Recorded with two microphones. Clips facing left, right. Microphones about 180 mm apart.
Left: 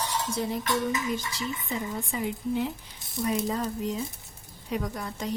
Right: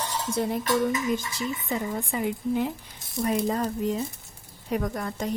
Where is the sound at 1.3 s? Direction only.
50° right (ahead or behind).